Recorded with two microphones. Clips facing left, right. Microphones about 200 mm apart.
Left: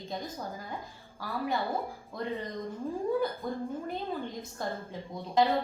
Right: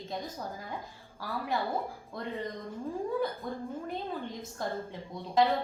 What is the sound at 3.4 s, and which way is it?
Speech, centre (ahead or behind).